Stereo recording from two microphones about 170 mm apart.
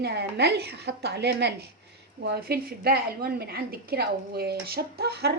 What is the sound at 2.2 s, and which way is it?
A woman's voice, 70° right (ahead or behind).